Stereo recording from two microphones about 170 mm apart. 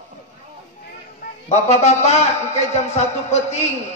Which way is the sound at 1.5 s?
40° left (ahead or behind).